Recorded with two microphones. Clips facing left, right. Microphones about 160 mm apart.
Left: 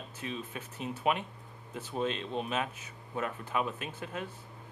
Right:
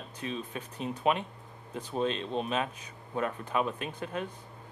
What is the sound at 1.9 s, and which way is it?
Speech, 30° right (ahead or behind).